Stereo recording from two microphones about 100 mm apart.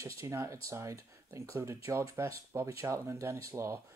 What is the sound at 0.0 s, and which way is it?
Speech, 30° right (ahead or behind).